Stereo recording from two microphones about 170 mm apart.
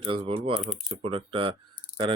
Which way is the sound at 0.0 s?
35° right (ahead or behind).